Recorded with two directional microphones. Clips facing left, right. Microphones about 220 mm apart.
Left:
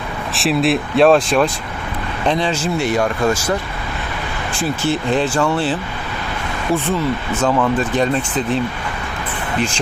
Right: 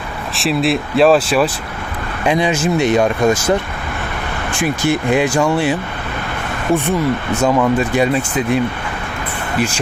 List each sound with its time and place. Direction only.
0.3 s speech: centre (ahead or behind); by 3.5 s 20° right (ahead or behind)
4.5 s speech: 15° right (ahead or behind)
7.4 s speech: 10° right (ahead or behind)